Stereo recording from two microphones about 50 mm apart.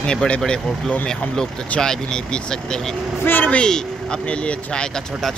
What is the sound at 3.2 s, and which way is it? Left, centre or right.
Speech, left.